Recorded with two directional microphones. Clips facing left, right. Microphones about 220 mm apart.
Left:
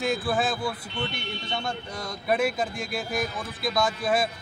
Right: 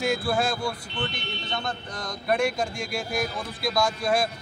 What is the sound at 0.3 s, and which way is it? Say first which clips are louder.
Speech: right 1 dB; centre (ahead or behind).